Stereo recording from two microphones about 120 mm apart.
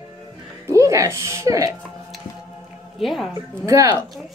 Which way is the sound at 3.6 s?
30° right (ahead or behind).